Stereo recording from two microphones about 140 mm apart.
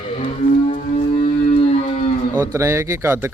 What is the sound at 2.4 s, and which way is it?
Speech, 20° right (ahead or behind).